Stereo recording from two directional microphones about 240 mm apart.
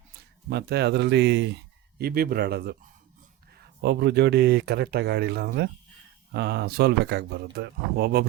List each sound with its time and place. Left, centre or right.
0.5 s speech: right